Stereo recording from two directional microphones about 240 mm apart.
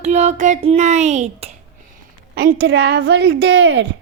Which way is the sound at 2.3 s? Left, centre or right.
Right.